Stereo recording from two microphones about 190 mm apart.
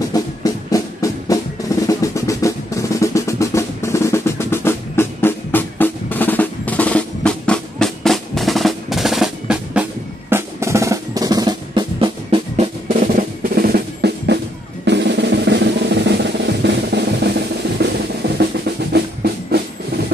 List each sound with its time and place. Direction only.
0.1 s music: 20° left (ahead or behind)
1.9 s drum roll: 15° left (ahead or behind); by 9.8 s 5° right (ahead or behind)
10.3 s drum: 15° right (ahead or behind); by 20.1 s 55° right (ahead or behind)